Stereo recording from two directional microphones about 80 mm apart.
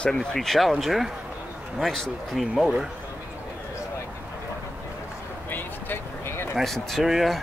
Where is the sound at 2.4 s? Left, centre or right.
Centre.